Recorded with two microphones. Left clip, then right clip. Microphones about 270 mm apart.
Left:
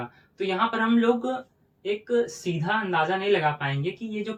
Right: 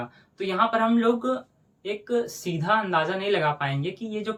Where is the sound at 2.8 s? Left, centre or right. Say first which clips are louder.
Left 1 dB; centre.